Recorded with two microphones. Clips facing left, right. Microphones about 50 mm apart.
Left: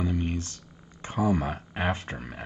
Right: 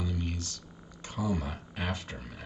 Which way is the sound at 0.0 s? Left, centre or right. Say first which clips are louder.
Left 7 dB; left.